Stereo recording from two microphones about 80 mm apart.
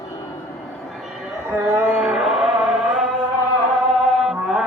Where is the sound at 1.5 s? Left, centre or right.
Right.